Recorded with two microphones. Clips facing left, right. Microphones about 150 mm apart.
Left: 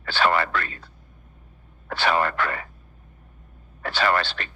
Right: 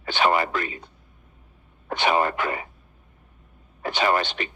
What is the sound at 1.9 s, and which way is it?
Speech, 15° right (ahead or behind).